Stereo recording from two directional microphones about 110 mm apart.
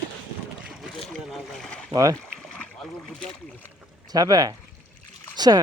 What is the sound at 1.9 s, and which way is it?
Speech, 30° right (ahead or behind).